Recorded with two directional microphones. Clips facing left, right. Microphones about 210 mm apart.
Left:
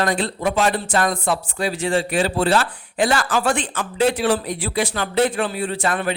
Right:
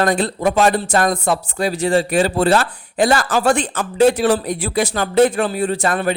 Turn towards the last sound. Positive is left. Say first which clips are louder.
# right 4 dB
turn(degrees=-45)  # may be behind; listen again after turning